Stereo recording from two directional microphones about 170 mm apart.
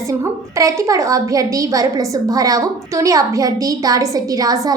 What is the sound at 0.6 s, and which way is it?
A woman's voice, 20° right (ahead or behind).